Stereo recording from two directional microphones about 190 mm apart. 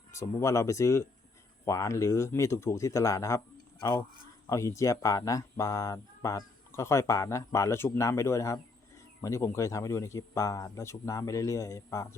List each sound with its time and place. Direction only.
0.1 s speech: 15° left (ahead or behind)